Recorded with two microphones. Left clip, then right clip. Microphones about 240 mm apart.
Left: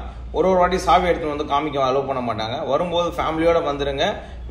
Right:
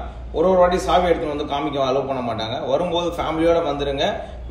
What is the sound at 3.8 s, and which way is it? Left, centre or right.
Speech, centre.